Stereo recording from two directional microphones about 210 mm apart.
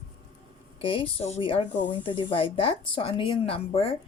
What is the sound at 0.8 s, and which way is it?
A woman's voice, 25° left (ahead or behind).